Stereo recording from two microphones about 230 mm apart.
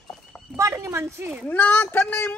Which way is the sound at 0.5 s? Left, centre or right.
Centre.